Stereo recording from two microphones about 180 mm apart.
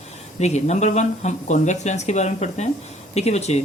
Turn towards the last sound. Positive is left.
turn(degrees=35)  # may be behind; listen again after turning